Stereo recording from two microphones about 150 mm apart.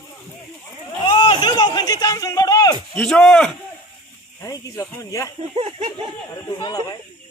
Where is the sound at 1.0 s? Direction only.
30° left (ahead or behind).